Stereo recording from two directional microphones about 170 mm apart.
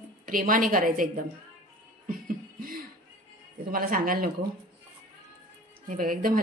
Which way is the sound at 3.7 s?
55° right (ahead or behind).